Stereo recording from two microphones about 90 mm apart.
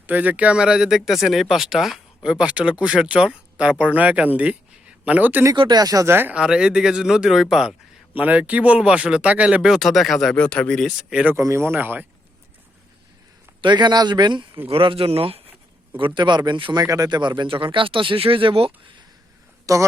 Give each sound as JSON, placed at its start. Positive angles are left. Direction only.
{"t": 0.1, "sound": "speech", "side_deg": -20}
{"t": 5.5, "sound": "speech", "side_deg": -50}
{"t": 6.1, "sound": "speech", "side_deg": -25}
{"t": 6.3, "sound": "speech", "side_deg": -10}
{"t": 8.1, "sound": "speech", "side_deg": -15}
{"t": 11.1, "sound": "speech", "side_deg": -15}
{"t": 11.3, "sound": "speech", "side_deg": -30}
{"t": 13.6, "sound": "speech", "side_deg": -55}
{"t": 14.7, "sound": "speech", "side_deg": -85}
{"t": 16.0, "sound": "speech", "side_deg": -65}
{"t": 16.8, "sound": "speech", "side_deg": -40}
{"t": 19.7, "sound": "a woman's voice", "side_deg": -40}